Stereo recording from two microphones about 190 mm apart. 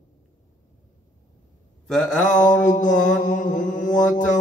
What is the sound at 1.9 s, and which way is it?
Mantra, 5° left (ahead or behind).